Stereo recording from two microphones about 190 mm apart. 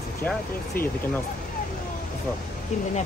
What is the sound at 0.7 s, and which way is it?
Speech, 50° left (ahead or behind).